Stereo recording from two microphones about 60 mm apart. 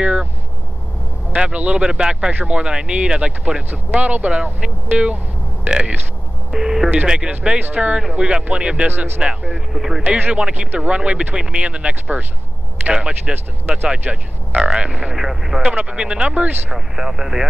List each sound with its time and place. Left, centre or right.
0.0 s vehicle: right
1.3 s speech: right
8.8 s speech: right
9.2 s speech: centre
9.7 s speech: centre
10.0 s speech: right
10.3 s speech: centre
13.3 s speech: right
15.1 s speech: centre
15.6 s speech: centre
16.7 s speech: centre